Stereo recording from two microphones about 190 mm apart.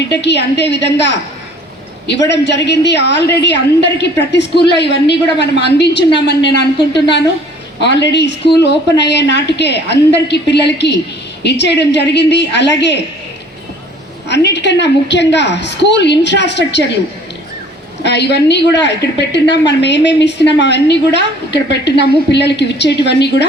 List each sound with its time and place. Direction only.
0.1 s a woman's voice: 65° left (ahead or behind)
7.8 s a woman's voice: 65° left (ahead or behind)
14.3 s a woman's voice: 65° left (ahead or behind)
18.0 s a woman's voice: 65° left (ahead or behind)